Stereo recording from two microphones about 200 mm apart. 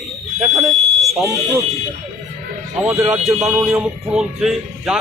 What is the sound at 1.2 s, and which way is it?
Speech, 15° right (ahead or behind).